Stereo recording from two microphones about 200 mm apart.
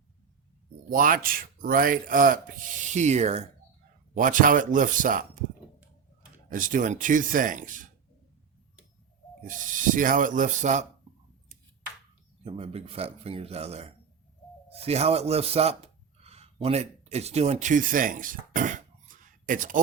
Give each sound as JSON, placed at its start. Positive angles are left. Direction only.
{"t": 0.9, "sound": "speech", "side_deg": -45}
{"t": 6.5, "sound": "speech", "side_deg": -40}
{"t": 9.5, "sound": "speech", "side_deg": -40}
{"t": 12.5, "sound": "speech", "side_deg": -30}